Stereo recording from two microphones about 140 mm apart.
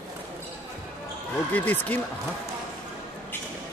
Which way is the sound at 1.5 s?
10° left (ahead or behind).